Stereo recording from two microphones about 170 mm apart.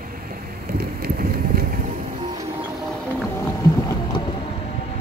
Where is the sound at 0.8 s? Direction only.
65° right (ahead or behind).